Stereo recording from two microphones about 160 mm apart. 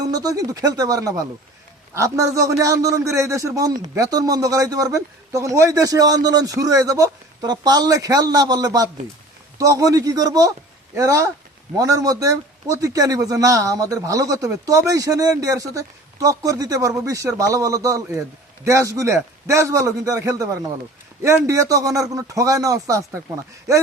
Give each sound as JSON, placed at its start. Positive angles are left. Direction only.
{"t": 0.1, "sound": "a man's voice", "side_deg": -20}